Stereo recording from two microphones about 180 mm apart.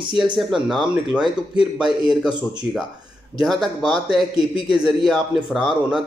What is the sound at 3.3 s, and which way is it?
Speech, centre (ahead or behind).